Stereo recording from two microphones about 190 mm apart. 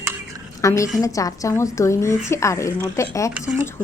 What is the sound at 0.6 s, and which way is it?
A woman's voice, 15° left (ahead or behind).